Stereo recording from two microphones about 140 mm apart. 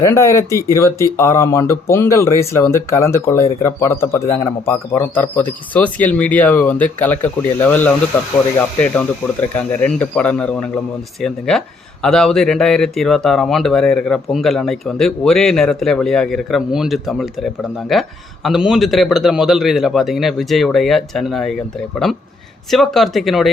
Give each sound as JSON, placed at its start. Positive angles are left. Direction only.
{"t": 0.0, "sound": "speech", "side_deg": 20}